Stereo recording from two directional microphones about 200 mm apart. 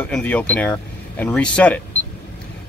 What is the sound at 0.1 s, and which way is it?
Speech, 5° left (ahead or behind).